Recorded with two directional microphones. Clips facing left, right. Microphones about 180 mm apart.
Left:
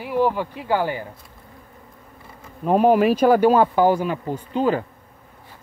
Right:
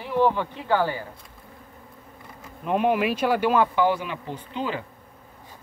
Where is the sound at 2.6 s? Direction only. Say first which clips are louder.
Left 6 dB; 40° left (ahead or behind).